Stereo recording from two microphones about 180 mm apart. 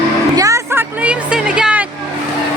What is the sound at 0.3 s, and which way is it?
Music, 15° right (ahead or behind).